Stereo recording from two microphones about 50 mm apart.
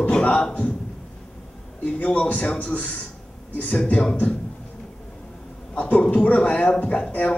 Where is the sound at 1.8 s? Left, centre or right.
Left.